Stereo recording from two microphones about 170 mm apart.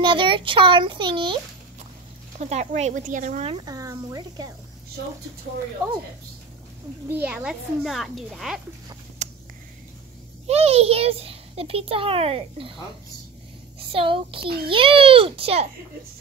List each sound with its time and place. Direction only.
0.0 s a child's voice: 30° right (ahead or behind)
2.3 s speech: 40° right (ahead or behind)
3.4 s a child's voice: 25° right (ahead or behind)
7.1 s a child's voice: 10° right (ahead or behind)
9.2 s a sound: 45° right (ahead or behind)
10.4 s a child's voice: 35° right (ahead or behind)
13.7 s a child's voice: 30° right (ahead or behind)